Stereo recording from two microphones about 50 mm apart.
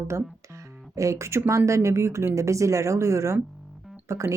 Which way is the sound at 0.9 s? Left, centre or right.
Right.